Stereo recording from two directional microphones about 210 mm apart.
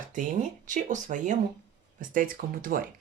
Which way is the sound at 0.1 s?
35° right (ahead or behind).